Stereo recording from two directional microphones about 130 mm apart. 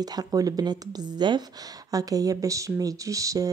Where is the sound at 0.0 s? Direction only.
30° right (ahead or behind).